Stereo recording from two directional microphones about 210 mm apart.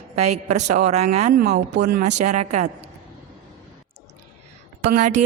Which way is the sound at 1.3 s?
50° right (ahead or behind).